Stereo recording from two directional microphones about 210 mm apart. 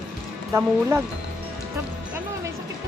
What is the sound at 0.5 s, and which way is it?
Speech, 10° right (ahead or behind).